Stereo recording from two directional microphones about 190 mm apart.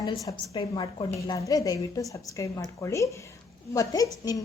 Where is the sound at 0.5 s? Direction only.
25° left (ahead or behind).